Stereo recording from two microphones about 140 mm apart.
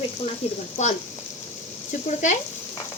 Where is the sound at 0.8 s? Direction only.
55° left (ahead or behind).